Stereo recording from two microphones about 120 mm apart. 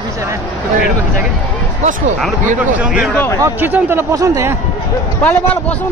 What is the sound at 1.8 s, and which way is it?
Speech, 90° right.